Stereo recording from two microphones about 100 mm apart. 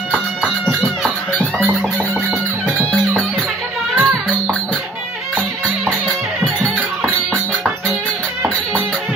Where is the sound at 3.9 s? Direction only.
15° right (ahead or behind).